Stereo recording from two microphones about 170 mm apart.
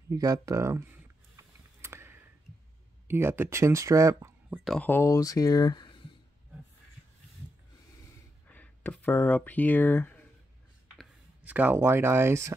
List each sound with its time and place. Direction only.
0.1 s speech: 20° right (ahead or behind)
1.3 s a sound: 15° right (ahead or behind)
3.1 s speech: 15° right (ahead or behind)
4.6 s speech: 10° left (ahead or behind); by 5.9 s 25° left (ahead or behind)
8.5 s speech: 10° left (ahead or behind)
11.0 s speech: 10° right (ahead or behind)